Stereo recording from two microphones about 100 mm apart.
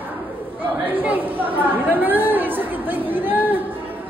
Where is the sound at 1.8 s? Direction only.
20° right (ahead or behind).